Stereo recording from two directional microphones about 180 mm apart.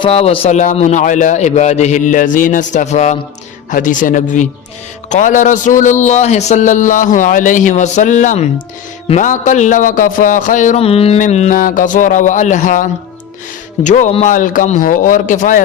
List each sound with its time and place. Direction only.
0.0 s a man's voice: 35° left (ahead or behind)